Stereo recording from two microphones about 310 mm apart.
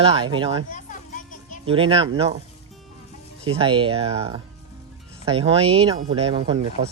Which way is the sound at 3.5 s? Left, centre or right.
Centre.